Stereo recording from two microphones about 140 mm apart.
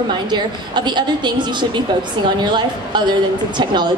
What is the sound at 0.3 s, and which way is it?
A woman's voice, 35° right (ahead or behind).